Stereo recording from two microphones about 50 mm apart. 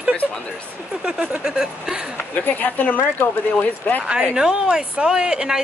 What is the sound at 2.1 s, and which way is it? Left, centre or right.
Speech, left.